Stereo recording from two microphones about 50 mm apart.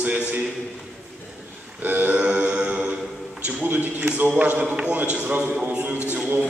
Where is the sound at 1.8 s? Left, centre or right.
Right.